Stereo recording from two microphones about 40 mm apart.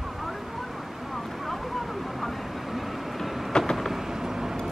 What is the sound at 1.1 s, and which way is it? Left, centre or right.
Vehicle, centre.